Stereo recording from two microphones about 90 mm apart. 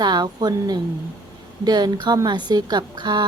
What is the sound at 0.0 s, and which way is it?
A woman's voice, 50° right (ahead or behind).